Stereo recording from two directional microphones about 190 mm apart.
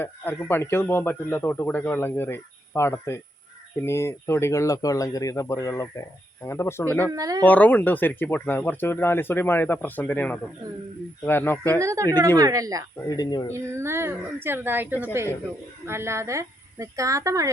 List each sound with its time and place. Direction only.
0.0 s a man's voice: 10° left (ahead or behind)
7.1 s speech: 20° right (ahead or behind)
7.4 s a man's voice: 10° left (ahead or behind)
11.8 s a woman's voice: 15° right (ahead or behind)
13.1 s speech: 20° left (ahead or behind)
13.5 s a woman's voice: 15° right (ahead or behind)